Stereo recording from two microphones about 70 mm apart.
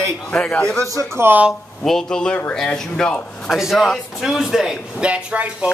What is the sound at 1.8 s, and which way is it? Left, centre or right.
Speech, centre.